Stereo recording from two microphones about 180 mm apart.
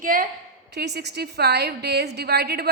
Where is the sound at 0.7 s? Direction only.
65° right (ahead or behind).